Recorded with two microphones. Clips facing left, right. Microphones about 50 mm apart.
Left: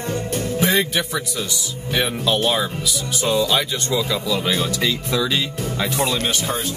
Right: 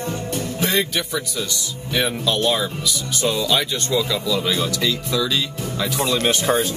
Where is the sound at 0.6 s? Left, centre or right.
Centre; by 6.1 s left.